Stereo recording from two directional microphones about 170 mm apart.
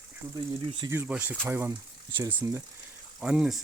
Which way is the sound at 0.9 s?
10° right (ahead or behind).